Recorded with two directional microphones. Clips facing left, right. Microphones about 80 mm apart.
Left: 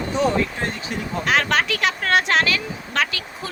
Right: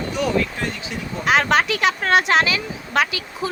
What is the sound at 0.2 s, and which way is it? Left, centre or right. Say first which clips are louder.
Speech: left 3 dB; left.